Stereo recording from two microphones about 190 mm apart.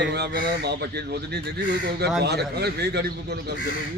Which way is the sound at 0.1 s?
60° right (ahead or behind).